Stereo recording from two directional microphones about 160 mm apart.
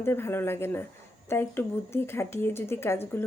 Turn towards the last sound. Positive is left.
turn(degrees=15)  # may be behind; listen again after turning